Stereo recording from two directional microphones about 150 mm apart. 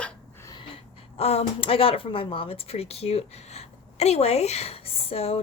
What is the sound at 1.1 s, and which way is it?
Speech, 45° left (ahead or behind).